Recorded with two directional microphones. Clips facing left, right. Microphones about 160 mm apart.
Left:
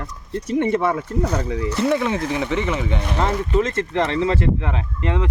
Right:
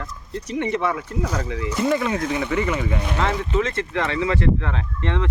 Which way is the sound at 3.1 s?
30° left (ahead or behind).